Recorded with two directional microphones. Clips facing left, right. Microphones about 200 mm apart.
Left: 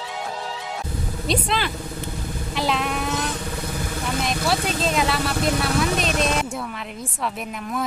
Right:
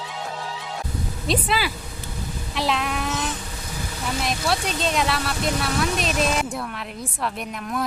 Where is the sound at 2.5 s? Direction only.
Centre (ahead or behind).